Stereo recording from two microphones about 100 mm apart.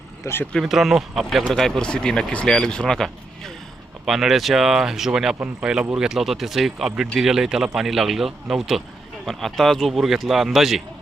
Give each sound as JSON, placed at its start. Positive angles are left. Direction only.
{"t": 0.2, "sound": "speech", "side_deg": 30}
{"t": 0.6, "sound": "speech", "side_deg": 0}